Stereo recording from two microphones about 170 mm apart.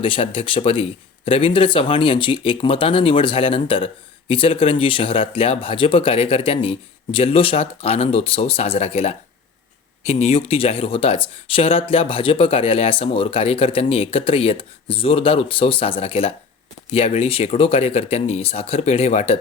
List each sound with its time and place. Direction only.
0.0 s speech: 30° left (ahead or behind)